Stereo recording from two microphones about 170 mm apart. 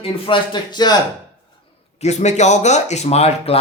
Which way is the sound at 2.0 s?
40° left (ahead or behind).